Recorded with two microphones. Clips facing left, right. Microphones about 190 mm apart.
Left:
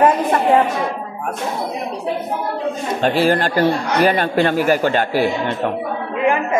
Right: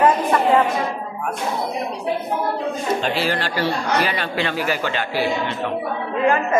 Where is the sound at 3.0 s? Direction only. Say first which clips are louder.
Left 6 dB; 50° left (ahead or behind).